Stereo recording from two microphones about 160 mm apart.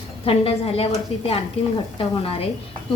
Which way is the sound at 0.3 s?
40° left (ahead or behind).